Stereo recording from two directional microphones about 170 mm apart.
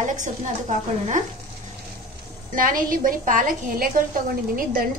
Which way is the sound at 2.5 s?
55° right (ahead or behind).